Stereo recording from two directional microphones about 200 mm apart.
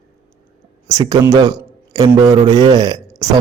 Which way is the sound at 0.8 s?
20° right (ahead or behind).